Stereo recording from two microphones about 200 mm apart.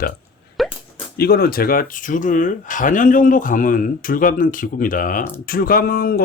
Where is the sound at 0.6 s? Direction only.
Centre (ahead or behind).